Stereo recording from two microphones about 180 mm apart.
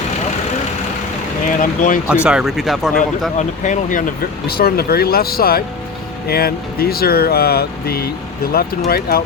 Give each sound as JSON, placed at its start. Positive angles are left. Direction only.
{"t": 1.5, "sound": "speech", "side_deg": 45}
{"t": 2.2, "sound": "speech", "side_deg": -5}
{"t": 2.9, "sound": "speech", "side_deg": 45}